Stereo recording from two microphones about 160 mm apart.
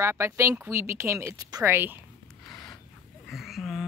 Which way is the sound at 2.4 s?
5° left (ahead or behind).